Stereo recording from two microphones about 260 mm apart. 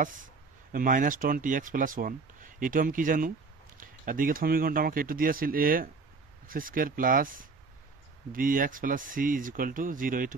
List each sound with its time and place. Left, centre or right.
0.0 s speech: right